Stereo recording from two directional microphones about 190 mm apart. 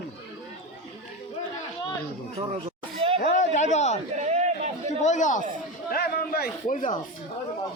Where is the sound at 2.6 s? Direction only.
30° right (ahead or behind).